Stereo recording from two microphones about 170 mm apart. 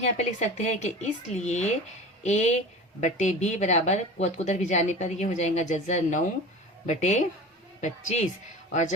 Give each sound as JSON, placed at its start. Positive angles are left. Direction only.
{"t": 0.0, "sound": "a woman's voice", "side_deg": 45}